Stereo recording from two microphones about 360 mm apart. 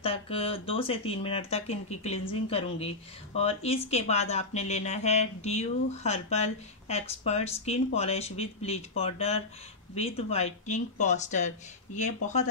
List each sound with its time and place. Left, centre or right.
0.0 s speech: centre